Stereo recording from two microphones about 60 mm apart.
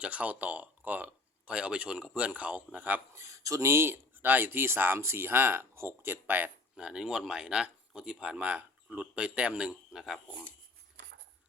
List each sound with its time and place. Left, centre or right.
0.0 s speech: right
1.5 s speech: centre
3.2 s speech: right
3.7 s speech: right
6.2 s speech: right
6.7 s speech: centre